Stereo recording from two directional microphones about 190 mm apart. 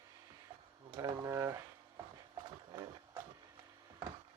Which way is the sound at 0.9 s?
20° right (ahead or behind).